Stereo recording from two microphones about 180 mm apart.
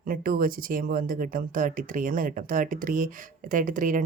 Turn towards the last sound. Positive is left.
turn(degrees=-45)  # may be behind; listen again after turning